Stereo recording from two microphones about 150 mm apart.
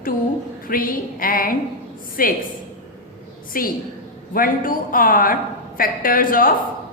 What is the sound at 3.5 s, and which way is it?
A woman's voice, 70° left (ahead or behind).